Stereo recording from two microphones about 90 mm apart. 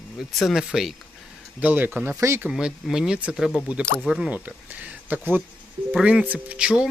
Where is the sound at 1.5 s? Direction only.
15° right (ahead or behind).